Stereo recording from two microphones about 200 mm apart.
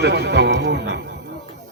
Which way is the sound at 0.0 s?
60° right (ahead or behind).